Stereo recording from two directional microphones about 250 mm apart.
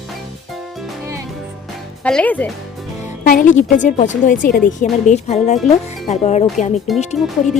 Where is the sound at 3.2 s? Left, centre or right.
Left.